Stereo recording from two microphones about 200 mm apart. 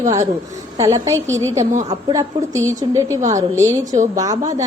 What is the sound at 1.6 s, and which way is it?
Speech, 40° right (ahead or behind).